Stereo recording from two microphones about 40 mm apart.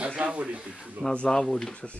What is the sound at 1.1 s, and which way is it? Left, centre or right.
Speech, left.